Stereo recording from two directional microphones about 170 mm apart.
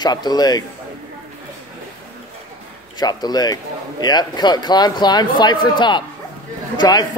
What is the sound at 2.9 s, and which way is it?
A man's voice, 25° left (ahead or behind).